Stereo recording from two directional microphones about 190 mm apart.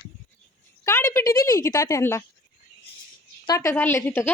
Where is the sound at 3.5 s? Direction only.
15° left (ahead or behind).